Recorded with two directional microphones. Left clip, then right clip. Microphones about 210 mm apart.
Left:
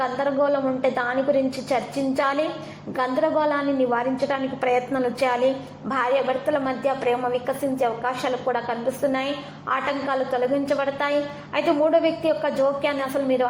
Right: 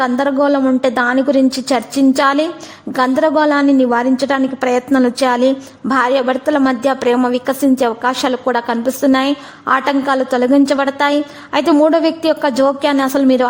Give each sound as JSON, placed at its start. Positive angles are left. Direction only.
{"t": 0.0, "sound": "a woman's voice", "side_deg": -40}